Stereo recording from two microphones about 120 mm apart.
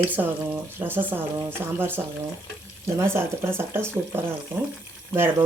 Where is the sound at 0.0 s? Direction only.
15° right (ahead or behind).